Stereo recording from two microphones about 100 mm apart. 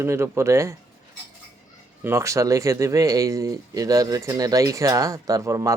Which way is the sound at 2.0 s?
30° right (ahead or behind).